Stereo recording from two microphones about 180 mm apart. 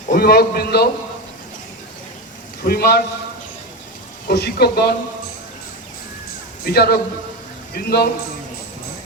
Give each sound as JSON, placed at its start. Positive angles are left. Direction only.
{"t": 0.1, "sound": "a man's voice", "side_deg": 60}
{"t": 2.6, "sound": "a man's voice", "side_deg": 60}
{"t": 4.3, "sound": "a man's voice", "side_deg": 65}
{"t": 6.7, "sound": "a man's voice", "side_deg": 60}